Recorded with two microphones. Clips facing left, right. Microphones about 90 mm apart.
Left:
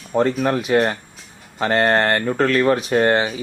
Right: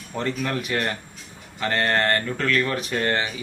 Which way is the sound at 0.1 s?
40° left (ahead or behind).